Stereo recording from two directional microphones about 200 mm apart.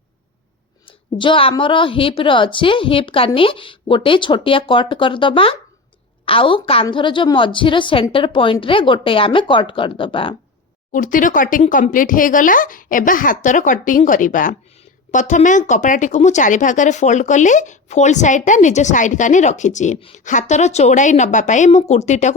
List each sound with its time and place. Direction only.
0.9 s a woman's voice: 25° left (ahead or behind)
10.9 s speech: 40° left (ahead or behind)